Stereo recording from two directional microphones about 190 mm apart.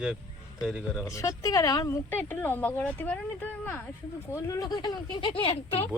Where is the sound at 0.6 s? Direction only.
5° right (ahead or behind).